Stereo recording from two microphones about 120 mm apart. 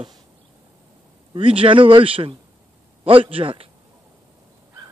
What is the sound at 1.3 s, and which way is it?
Speech, 50° right (ahead or behind).